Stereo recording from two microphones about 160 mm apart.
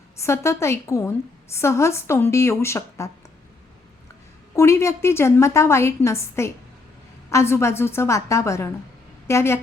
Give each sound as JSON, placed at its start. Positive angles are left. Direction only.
{"t": 0.2, "sound": "a woman's voice", "side_deg": 15}
{"t": 4.5, "sound": "a woman's voice", "side_deg": 15}